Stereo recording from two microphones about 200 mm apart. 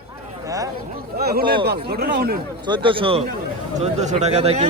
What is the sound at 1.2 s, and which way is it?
A man's voice, 50° right (ahead or behind).